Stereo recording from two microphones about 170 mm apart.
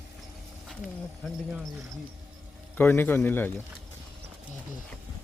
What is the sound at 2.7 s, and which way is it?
Speech, 10° left (ahead or behind).